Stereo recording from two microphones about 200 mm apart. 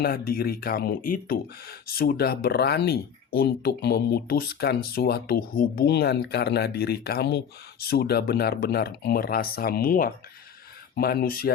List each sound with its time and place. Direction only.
0.0 s speech: 50° left (ahead or behind)